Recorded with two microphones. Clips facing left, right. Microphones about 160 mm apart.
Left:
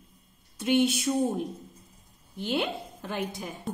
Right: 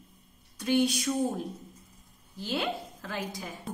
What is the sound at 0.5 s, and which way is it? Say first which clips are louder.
Speech: left 2 dB; 25° left (ahead or behind).